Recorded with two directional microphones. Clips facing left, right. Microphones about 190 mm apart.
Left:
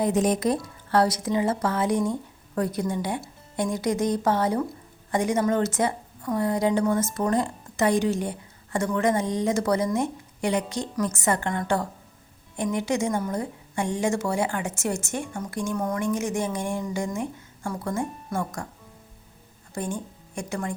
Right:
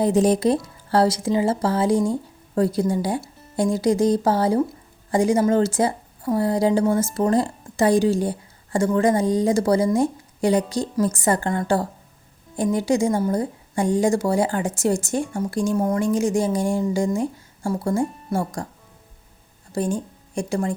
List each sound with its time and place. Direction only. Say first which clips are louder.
0.0 s a woman's voice: right 5 dB; 30° right (ahead or behind)
20.3 s a woman's voice: right 7 dB; 30° right (ahead or behind)